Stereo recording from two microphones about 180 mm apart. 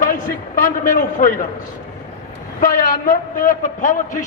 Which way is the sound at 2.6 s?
50° left (ahead or behind).